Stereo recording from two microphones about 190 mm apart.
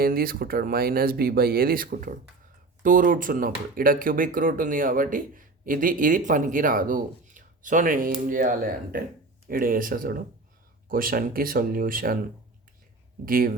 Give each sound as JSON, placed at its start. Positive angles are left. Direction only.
{"t": 0.0, "sound": "speech", "side_deg": -50}
{"t": 13.2, "sound": "speech", "side_deg": -50}